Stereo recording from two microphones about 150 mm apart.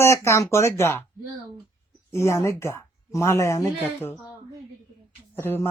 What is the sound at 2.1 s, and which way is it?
Speech, 20° left (ahead or behind).